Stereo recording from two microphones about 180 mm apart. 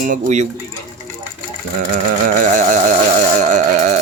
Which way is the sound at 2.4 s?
45° right (ahead or behind).